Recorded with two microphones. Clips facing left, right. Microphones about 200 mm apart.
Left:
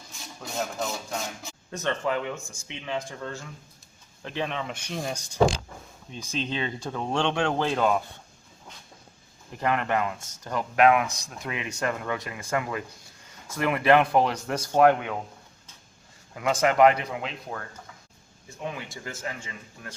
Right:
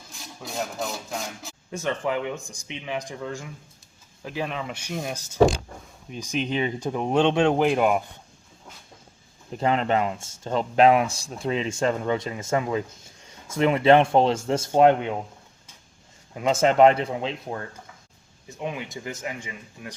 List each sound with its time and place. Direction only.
0.1 s rub: centre (ahead or behind)
1.7 s speech: 10° right (ahead or behind)
9.6 s speech: 25° right (ahead or behind)
16.3 s speech: 25° right (ahead or behind)